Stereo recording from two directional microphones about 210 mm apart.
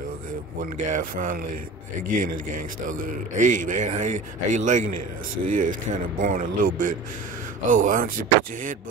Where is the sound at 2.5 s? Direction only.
40° right (ahead or behind).